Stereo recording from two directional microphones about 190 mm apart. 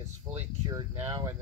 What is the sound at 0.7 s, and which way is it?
Speech, 20° right (ahead or behind).